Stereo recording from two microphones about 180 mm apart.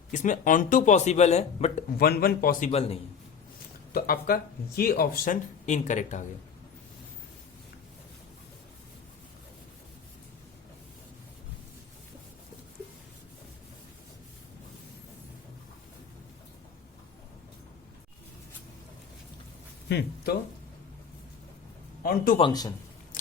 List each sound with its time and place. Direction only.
0.1 s speech: 45° left (ahead or behind)
2.0 s speech: 60° left (ahead or behind)
2.6 s speech: 35° left (ahead or behind)
3.9 s speech: 55° left (ahead or behind)
19.9 s speech: 70° left (ahead or behind)
22.0 s speech: 55° left (ahead or behind)
22.4 s a man's voice: 25° left (ahead or behind)
23.1 s biting: 50° left (ahead or behind)